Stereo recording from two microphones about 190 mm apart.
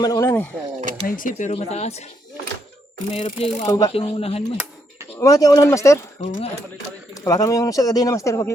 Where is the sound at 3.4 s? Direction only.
30° left (ahead or behind).